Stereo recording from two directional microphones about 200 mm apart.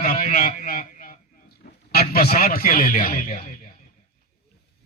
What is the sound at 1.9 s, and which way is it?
A man's voice, 50° left (ahead or behind).